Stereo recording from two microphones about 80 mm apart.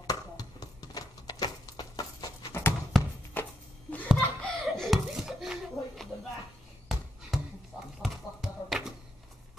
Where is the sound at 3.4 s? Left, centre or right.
Left.